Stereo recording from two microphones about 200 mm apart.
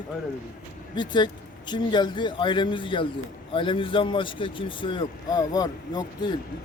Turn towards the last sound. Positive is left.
turn(degrees=20)  # may be behind; listen again after turning